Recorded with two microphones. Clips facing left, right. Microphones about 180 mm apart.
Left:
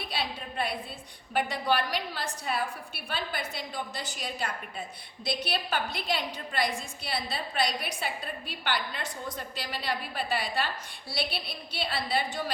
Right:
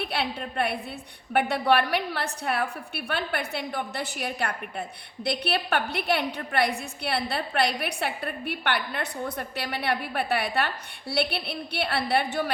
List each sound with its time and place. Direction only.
0.0 s a woman's voice: 65° right (ahead or behind)